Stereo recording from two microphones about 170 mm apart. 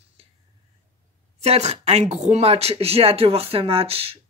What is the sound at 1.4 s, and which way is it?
Speech, 40° right (ahead or behind).